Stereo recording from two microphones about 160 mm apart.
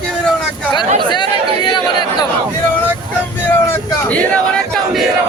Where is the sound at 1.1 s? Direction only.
30° left (ahead or behind).